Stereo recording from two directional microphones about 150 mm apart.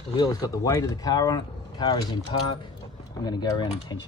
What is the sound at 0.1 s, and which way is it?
Speech, 25° left (ahead or behind).